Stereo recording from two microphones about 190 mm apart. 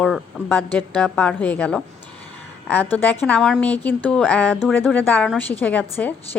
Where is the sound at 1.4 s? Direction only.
10° left (ahead or behind).